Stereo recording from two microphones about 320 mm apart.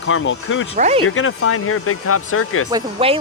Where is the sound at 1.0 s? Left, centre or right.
Left.